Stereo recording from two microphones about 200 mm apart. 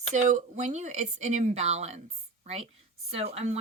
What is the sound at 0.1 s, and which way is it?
Speech, 35° right (ahead or behind).